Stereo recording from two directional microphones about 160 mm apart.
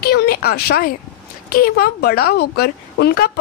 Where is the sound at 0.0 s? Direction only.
75° left (ahead or behind).